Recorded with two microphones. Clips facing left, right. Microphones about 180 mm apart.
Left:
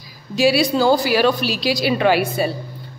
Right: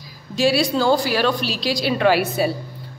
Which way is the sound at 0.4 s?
Centre (ahead or behind).